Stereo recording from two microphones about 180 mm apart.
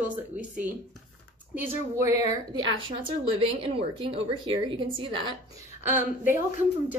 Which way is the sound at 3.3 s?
30° right (ahead or behind).